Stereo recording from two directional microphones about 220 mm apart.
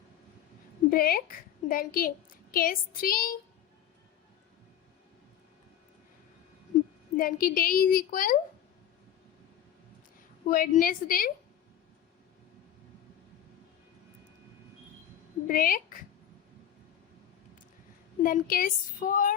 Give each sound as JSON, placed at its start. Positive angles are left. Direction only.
{"t": 0.9, "sound": "a woman's voice", "side_deg": 45}
{"t": 7.2, "sound": "a woman's voice", "side_deg": 40}
{"t": 10.5, "sound": "a woman's voice", "side_deg": 40}
{"t": 15.4, "sound": "speech", "side_deg": 40}
{"t": 18.2, "sound": "a woman's voice", "side_deg": 40}